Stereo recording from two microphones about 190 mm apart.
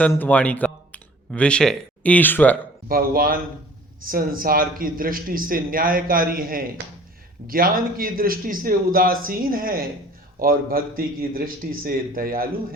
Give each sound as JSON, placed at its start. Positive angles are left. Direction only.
{"t": 0.0, "sound": "speech", "side_deg": 10}
{"t": 2.9, "sound": "a man's voice", "side_deg": -50}